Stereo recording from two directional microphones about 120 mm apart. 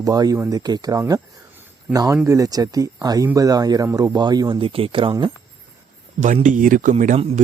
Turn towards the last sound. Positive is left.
turn(degrees=-90)